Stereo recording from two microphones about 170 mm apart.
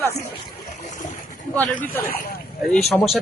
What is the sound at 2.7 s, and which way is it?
Speech, centre (ahead or behind).